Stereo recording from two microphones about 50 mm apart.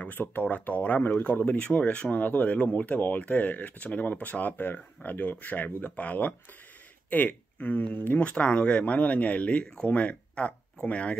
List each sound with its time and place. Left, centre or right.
0.0 s speech: left
8.2 s speech: left